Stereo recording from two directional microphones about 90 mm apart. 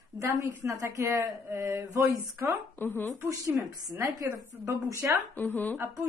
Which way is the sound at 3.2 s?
40° right (ahead or behind).